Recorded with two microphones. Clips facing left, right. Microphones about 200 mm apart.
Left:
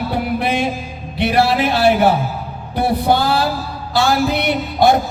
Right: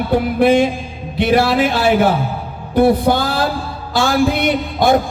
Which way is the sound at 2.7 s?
50° right (ahead or behind).